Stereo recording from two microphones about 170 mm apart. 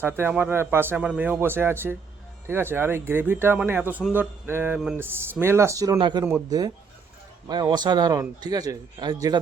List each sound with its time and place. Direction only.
0.2 s a man's voice: 10° right (ahead or behind)